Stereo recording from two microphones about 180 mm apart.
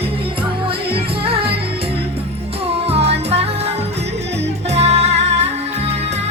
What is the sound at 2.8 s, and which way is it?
Music, 35° right (ahead or behind).